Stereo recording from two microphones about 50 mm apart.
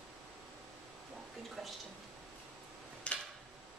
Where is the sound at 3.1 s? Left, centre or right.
Left.